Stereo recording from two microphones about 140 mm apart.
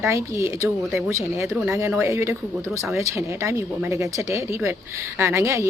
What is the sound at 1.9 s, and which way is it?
Speech, 20° right (ahead or behind).